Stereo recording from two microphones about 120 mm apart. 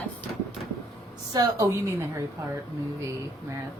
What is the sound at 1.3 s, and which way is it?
Speech, 35° right (ahead or behind).